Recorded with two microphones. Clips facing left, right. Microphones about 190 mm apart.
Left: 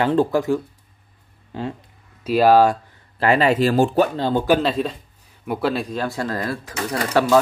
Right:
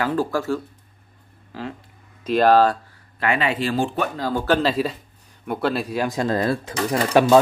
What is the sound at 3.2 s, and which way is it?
Speech, 40° left (ahead or behind).